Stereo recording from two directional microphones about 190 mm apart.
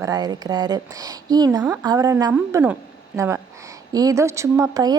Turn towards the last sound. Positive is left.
turn(degrees=-20)  # may be behind; listen again after turning